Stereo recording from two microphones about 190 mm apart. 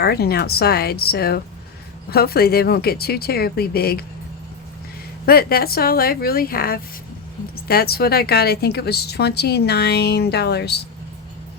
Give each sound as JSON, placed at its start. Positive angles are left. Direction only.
{"t": 0.0, "sound": "a woman's voice", "side_deg": 55}
{"t": 5.2, "sound": "a woman's voice", "side_deg": 50}